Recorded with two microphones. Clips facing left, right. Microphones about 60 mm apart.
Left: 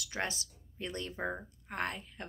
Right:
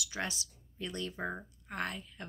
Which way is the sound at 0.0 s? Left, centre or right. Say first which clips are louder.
Left 1 dB; left.